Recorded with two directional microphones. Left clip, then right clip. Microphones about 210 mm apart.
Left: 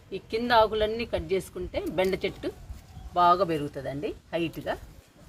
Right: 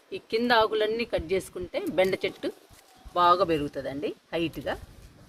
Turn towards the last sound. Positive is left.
turn(degrees=-45)  # may be behind; listen again after turning